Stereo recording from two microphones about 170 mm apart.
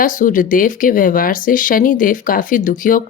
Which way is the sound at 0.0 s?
50° left (ahead or behind).